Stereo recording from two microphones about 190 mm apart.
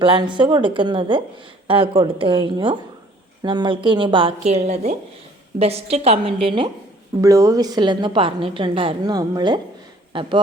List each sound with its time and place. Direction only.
0.0 s a woman's voice: 25° right (ahead or behind)